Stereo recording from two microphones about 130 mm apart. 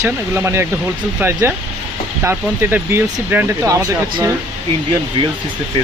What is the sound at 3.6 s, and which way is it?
Speech, 25° right (ahead or behind).